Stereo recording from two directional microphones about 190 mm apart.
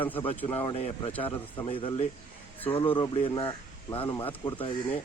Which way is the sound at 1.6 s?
30° left (ahead or behind).